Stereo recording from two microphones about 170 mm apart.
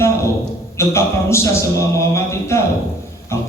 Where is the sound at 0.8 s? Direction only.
15° left (ahead or behind).